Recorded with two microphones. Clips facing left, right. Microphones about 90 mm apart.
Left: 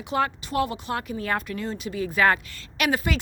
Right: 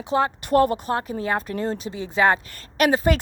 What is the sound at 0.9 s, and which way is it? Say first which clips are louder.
Speech: right 3 dB; 30° right (ahead or behind).